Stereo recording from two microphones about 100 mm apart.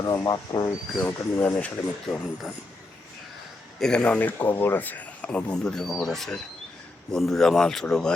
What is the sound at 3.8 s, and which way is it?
Speech, 10° left (ahead or behind).